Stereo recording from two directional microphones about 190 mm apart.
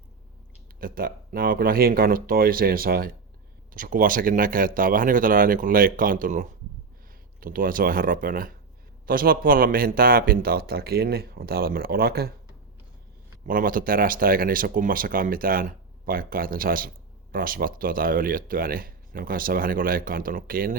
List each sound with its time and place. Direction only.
0.8 s speech: 50° right (ahead or behind)
13.5 s speech: 45° right (ahead or behind)